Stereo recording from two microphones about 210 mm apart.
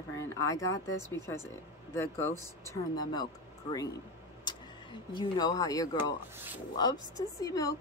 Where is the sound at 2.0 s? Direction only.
10° left (ahead or behind).